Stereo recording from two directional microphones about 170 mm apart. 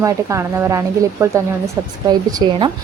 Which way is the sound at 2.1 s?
25° right (ahead or behind).